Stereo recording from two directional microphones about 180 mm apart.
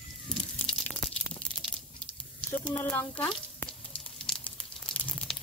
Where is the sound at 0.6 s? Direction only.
5° left (ahead or behind).